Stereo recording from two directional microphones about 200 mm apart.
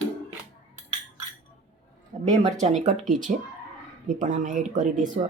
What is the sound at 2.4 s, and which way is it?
Speech, 35° right (ahead or behind).